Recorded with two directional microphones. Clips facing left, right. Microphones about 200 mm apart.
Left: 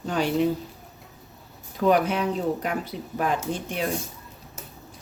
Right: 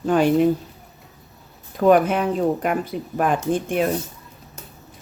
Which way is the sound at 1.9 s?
50° right (ahead or behind).